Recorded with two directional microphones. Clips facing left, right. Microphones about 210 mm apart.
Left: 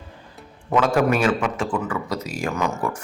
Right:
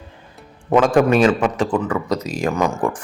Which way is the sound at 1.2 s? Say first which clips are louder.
Right 5 dB; 35° right (ahead or behind).